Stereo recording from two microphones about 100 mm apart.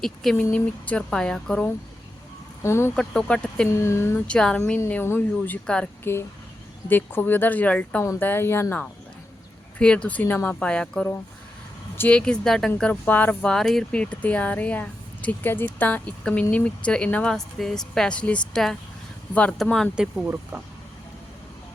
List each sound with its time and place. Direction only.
0.0 s a woman's voice: 5° left (ahead or behind)
2.6 s speech: 25° left (ahead or behind)
2.9 s speech: 10° left (ahead or behind)
3.7 s speech: 25° left (ahead or behind)
4.3 s speech: 10° left (ahead or behind)
5.6 s speech: 10° left (ahead or behind)
6.8 s speech: 20° left (ahead or behind)
9.7 s speech: 10° left (ahead or behind)
13.5 s a woman's voice: 5° left (ahead or behind)
20.0 s speech: 10° right (ahead or behind)